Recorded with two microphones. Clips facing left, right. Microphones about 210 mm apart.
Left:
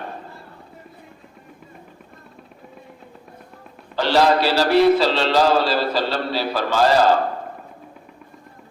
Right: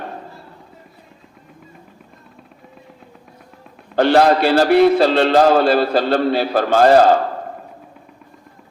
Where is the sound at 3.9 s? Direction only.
55° right (ahead or behind).